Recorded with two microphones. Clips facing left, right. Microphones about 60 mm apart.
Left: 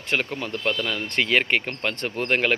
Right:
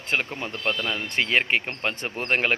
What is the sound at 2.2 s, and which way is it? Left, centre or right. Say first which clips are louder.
Speech: left 1 dB; right.